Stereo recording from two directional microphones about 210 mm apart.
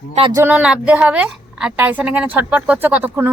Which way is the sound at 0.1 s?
25° right (ahead or behind).